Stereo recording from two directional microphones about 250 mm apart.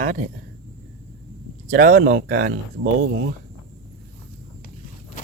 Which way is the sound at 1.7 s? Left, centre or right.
Right.